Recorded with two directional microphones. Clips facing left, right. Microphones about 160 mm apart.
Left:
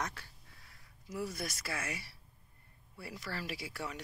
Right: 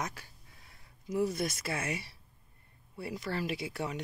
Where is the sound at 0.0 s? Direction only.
15° right (ahead or behind).